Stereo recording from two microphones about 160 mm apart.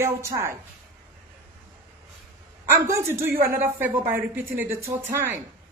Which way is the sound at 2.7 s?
20° right (ahead or behind).